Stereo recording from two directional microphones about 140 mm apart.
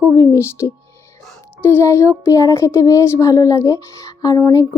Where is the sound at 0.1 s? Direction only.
25° left (ahead or behind).